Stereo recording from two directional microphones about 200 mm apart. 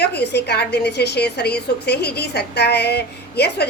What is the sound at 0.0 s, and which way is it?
A woman's voice, 55° left (ahead or behind).